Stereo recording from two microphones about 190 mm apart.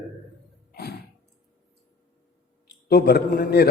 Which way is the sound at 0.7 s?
55° left (ahead or behind).